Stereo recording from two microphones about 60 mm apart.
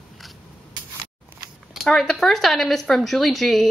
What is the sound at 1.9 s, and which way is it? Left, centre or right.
Speech, centre.